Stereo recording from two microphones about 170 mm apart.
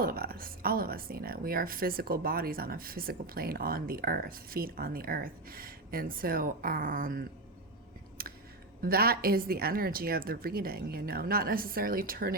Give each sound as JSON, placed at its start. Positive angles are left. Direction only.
{"t": 0.0, "sound": "speech", "side_deg": -60}
{"t": 8.2, "sound": "a sound", "side_deg": -60}
{"t": 8.8, "sound": "speech", "side_deg": -65}